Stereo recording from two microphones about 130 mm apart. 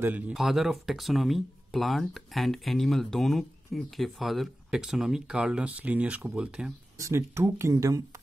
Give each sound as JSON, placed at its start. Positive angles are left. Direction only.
{"t": 0.3, "sound": "speech", "side_deg": 0}
{"t": 7.0, "sound": "speech", "side_deg": -20}